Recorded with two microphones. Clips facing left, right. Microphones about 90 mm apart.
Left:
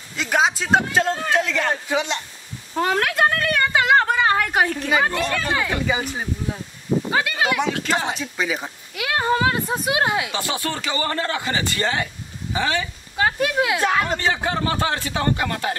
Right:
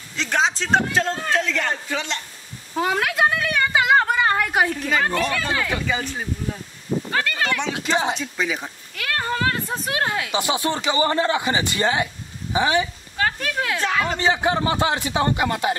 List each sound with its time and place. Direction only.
0.1 s a man's voice: 10° left (ahead or behind)
2.7 s a sound: centre (ahead or behind)
4.8 s speech: 15° left (ahead or behind)
5.2 s speech: centre (ahead or behind)
5.5 s speech: 10° left (ahead or behind)
10.3 s speech: 20° right (ahead or behind)
13.2 s speech: 10° left (ahead or behind)
14.1 s speech: 15° right (ahead or behind)